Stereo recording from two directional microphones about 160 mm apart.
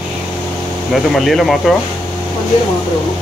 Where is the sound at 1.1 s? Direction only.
Centre (ahead or behind).